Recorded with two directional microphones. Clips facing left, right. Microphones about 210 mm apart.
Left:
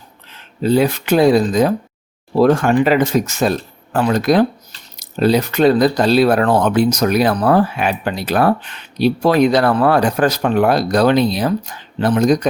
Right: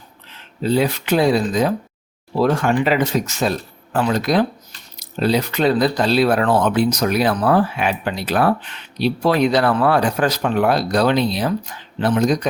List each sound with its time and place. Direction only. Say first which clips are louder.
0.6 s speech: left 4 dB; 50° left (ahead or behind)